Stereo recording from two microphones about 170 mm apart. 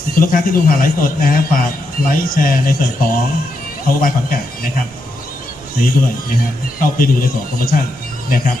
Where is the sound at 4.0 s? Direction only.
55° left (ahead or behind).